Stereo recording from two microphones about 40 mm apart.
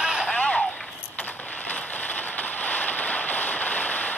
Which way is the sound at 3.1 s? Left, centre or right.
Left.